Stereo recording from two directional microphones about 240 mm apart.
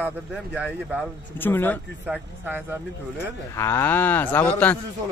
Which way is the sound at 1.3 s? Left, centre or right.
Centre.